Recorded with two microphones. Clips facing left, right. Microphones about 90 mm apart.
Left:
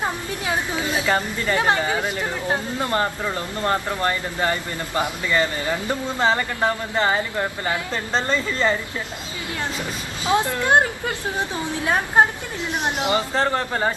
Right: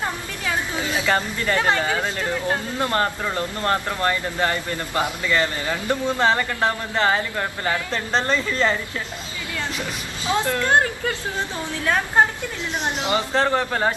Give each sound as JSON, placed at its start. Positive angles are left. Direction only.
{"t": 0.0, "sound": "speech", "side_deg": 20}
{"t": 10.2, "sound": "speech", "side_deg": 15}
{"t": 13.6, "sound": "a man's voice", "side_deg": -5}